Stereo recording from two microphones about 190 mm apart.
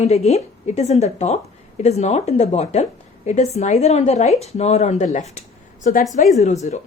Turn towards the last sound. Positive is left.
turn(degrees=35)  # may be behind; listen again after turning